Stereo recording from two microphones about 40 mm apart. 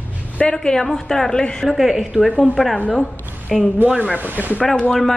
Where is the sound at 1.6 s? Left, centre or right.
Centre.